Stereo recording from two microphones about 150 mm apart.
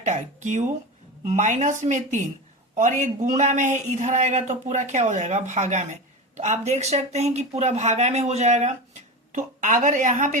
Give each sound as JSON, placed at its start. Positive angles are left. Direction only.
{"t": 0.0, "sound": "a man's voice", "side_deg": -55}